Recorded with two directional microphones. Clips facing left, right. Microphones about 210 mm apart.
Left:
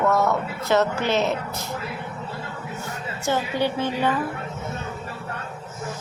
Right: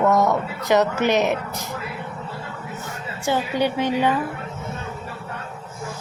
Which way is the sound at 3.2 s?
15° right (ahead or behind).